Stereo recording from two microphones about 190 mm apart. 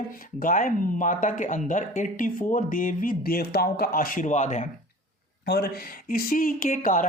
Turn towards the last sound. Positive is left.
turn(degrees=45)  # may be behind; listen again after turning